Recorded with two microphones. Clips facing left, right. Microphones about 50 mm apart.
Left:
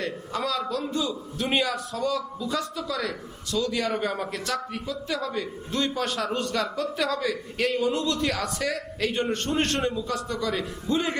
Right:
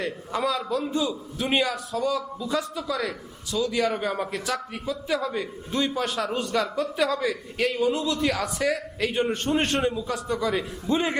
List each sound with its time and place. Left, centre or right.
0.0 s a man's voice: centre